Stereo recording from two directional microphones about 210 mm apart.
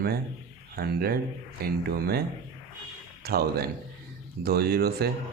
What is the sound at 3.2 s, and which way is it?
Speech, 45° right (ahead or behind).